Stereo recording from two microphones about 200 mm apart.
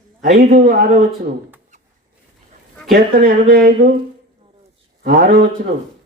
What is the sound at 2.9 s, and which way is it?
A man's voice, 50° right (ahead or behind).